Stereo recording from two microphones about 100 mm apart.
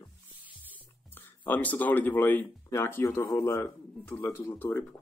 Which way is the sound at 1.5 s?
15° left (ahead or behind).